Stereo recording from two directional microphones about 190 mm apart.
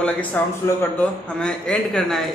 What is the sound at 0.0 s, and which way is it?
A man's voice, 10° left (ahead or behind).